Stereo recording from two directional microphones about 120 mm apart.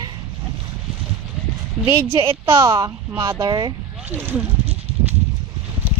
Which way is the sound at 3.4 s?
35° right (ahead or behind).